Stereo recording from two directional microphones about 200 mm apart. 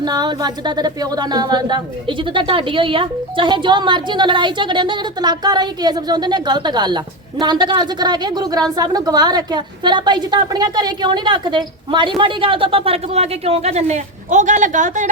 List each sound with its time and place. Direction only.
0.0 s speech: 20° right (ahead or behind); by 15.1 s 40° right (ahead or behind)